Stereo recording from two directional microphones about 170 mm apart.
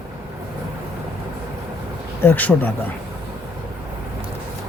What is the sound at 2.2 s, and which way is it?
Speech, 10° left (ahead or behind).